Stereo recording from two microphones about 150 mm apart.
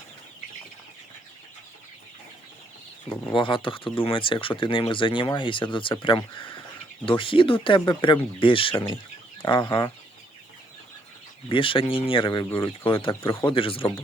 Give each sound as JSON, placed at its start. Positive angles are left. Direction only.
{"t": 3.3, "sound": "speech", "side_deg": 35}
{"t": 11.4, "sound": "speech", "side_deg": 35}